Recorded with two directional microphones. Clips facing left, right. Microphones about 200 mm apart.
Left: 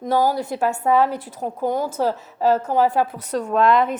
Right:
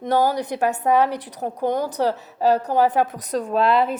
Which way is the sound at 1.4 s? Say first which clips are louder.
Even; 40° right (ahead or behind).